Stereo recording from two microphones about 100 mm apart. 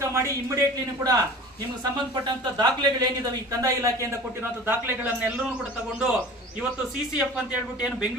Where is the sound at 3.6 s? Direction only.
30° right (ahead or behind).